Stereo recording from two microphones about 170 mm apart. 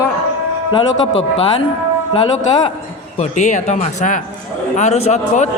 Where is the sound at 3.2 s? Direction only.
45° left (ahead or behind).